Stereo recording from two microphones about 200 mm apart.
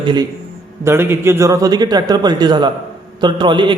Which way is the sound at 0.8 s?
10° right (ahead or behind).